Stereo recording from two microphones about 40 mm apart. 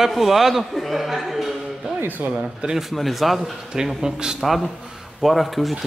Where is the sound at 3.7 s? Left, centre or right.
Centre.